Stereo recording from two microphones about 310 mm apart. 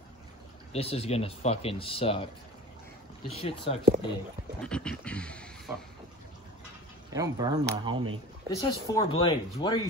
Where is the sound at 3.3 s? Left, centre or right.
Centre.